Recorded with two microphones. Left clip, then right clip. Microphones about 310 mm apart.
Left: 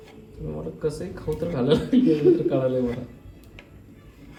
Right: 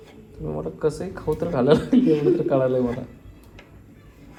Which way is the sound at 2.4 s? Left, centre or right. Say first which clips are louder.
Right 3 dB; right.